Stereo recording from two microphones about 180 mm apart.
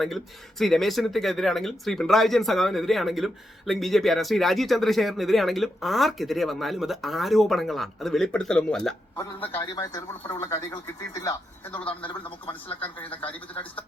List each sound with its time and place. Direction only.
0.6 s a man's voice: centre (ahead or behind); by 12.2 s 30° left (ahead or behind)